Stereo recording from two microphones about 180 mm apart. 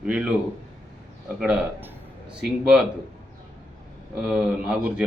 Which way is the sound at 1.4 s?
5° right (ahead or behind).